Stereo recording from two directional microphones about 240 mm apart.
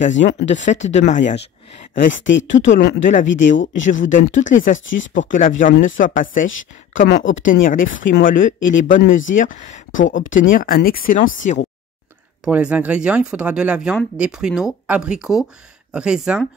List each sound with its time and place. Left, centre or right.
0.0 s speech: left
2.2 s speech: left
3.3 s speech: left
3.9 s speech: left
4.7 s speech: left
5.6 s speech: left
7.6 s speech: left
12.4 s speech: centre